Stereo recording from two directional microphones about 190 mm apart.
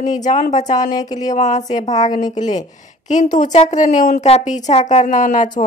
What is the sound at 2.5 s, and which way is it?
Speech, 40° left (ahead or behind).